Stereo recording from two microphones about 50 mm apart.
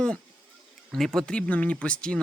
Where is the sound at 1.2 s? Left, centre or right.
Centre.